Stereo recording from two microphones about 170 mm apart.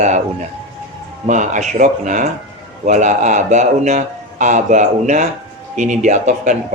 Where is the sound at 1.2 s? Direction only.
45° right (ahead or behind).